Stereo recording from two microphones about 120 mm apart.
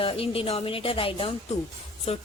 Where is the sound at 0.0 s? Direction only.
50° left (ahead or behind).